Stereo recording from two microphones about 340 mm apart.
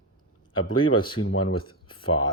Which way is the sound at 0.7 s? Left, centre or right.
Centre.